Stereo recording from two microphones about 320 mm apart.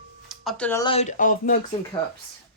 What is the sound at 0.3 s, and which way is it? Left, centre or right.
Speech, centre.